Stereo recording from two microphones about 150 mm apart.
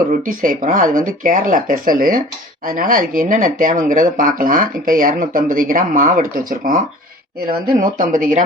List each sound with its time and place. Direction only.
0.3 s speech: 65° right (ahead or behind)